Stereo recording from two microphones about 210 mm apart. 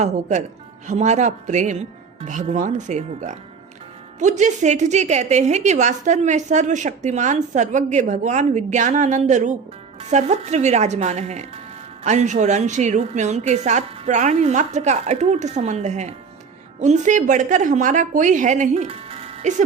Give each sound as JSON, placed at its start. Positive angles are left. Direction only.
{"t": 0.0, "sound": "a woman's voice", "side_deg": -35}